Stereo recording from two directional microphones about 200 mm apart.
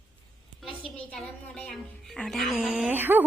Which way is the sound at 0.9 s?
5° left (ahead or behind).